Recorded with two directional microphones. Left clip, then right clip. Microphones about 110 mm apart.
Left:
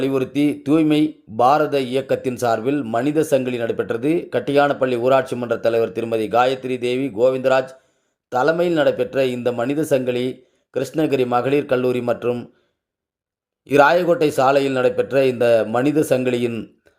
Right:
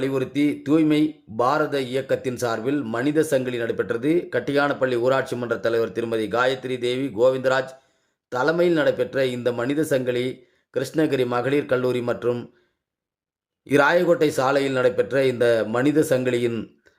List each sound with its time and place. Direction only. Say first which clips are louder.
0.0 s speech: left 3 dB; 15° left (ahead or behind)
13.7 s speech: left 4 dB; 15° left (ahead or behind)